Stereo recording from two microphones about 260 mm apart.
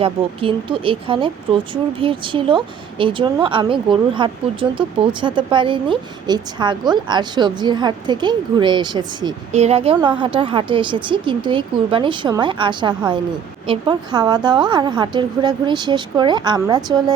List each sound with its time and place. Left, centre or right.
0.0 s speech: centre